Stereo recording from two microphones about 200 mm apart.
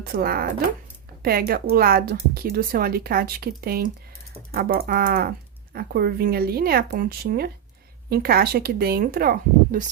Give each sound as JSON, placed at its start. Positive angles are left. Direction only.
{"t": 0.0, "sound": "speech", "side_deg": -50}